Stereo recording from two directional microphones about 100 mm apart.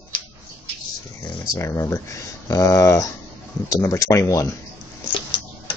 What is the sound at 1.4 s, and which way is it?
Speech, 30° left (ahead or behind).